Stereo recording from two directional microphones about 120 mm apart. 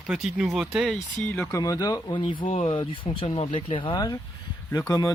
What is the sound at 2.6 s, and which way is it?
Speech, 45° left (ahead or behind).